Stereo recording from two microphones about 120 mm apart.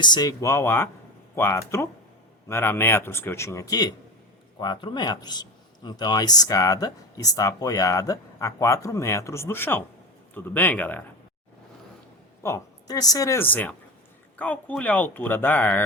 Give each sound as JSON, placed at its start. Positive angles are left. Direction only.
{"t": 0.0, "sound": "a man's voice", "side_deg": 35}
{"t": 12.4, "sound": "speech", "side_deg": 25}